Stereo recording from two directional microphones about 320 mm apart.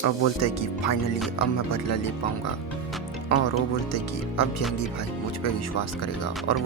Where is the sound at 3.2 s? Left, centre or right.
Left.